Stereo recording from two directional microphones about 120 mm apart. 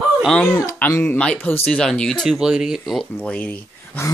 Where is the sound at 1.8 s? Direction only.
5° left (ahead or behind).